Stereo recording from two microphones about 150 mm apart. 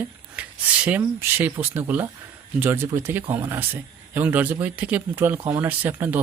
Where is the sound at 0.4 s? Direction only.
10° right (ahead or behind).